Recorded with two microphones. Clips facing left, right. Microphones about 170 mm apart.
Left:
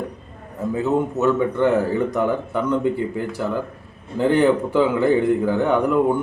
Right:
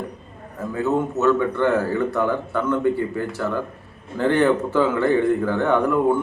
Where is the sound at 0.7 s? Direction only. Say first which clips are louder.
Left 1 dB; 15° left (ahead or behind).